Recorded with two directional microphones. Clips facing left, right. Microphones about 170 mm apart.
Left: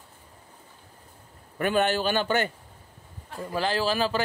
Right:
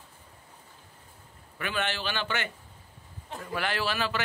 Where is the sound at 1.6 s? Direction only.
40° left (ahead or behind).